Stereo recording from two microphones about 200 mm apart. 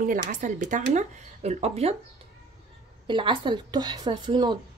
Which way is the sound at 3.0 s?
25° right (ahead or behind).